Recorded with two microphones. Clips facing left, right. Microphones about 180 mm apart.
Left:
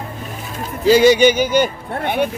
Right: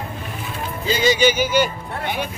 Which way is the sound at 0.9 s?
65° left (ahead or behind).